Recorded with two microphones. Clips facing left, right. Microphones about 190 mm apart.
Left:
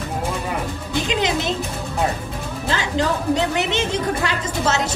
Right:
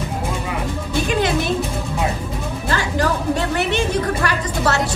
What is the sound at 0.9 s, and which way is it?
Music, 20° left (ahead or behind).